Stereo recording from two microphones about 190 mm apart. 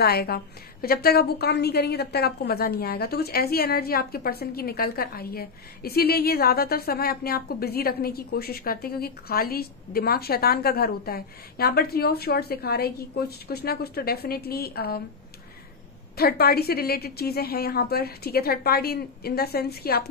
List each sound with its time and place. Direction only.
0.0 s a woman's voice: 55° left (ahead or behind)
16.2 s a woman's voice: 55° left (ahead or behind)